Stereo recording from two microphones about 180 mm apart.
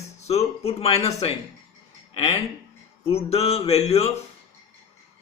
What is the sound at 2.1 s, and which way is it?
A man's voice, 35° left (ahead or behind).